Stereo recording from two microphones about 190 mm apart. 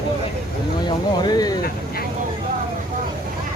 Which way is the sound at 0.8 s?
20° left (ahead or behind).